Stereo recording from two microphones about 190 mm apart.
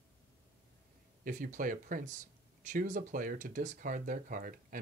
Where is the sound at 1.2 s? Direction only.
45° right (ahead or behind).